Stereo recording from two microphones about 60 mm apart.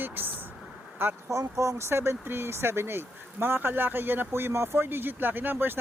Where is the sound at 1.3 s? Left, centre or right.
Right.